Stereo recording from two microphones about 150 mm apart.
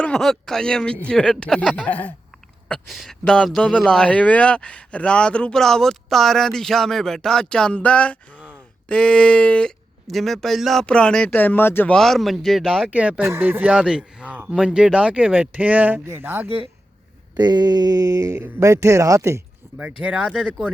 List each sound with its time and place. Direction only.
0.0 s a man's voice: 5° left (ahead or behind)
8.3 s a sound: 10° right (ahead or behind)
8.9 s speech: 5° left (ahead or behind)
11.9 s a man's voice: centre (ahead or behind); by 16.5 s 15° right (ahead or behind)
17.3 s speech: 30° right (ahead or behind)
19.6 s a sound: 20° right (ahead or behind)
20.0 s speech: 5° right (ahead or behind)